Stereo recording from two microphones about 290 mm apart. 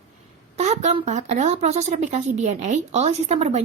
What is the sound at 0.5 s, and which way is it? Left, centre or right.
Speech, right.